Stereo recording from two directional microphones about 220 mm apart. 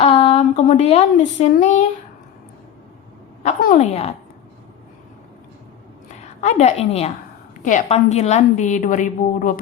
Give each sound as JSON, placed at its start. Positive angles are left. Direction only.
{"t": 0.0, "sound": "speech", "side_deg": 30}
{"t": 3.4, "sound": "a woman's voice", "side_deg": 35}
{"t": 6.4, "sound": "a woman's voice", "side_deg": 30}